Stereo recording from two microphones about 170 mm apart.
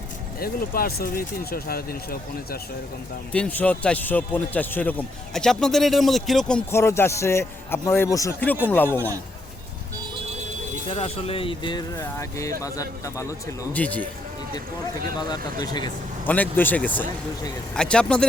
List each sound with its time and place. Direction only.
0.3 s speech: 60° left (ahead or behind)
3.3 s a man's voice: 5° left (ahead or behind)
6.7 s a man's voice: 15° left (ahead or behind)
10.8 s speech: 35° left (ahead or behind)
13.7 s a man's voice: 10° left (ahead or behind)
15.6 s speech: 25° left (ahead or behind)
16.2 s a man's voice: 10° left (ahead or behind)